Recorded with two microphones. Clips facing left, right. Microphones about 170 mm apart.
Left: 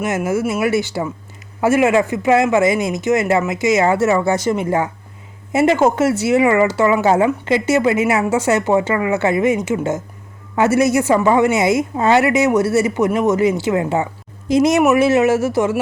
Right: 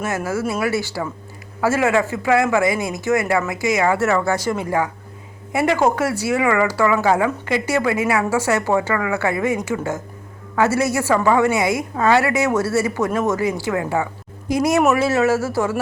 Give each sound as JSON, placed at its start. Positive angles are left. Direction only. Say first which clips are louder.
{"t": 0.0, "sound": "speech", "louder": "left 4 dB", "side_deg": 20}